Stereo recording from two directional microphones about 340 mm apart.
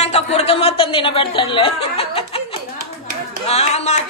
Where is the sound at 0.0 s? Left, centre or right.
Centre.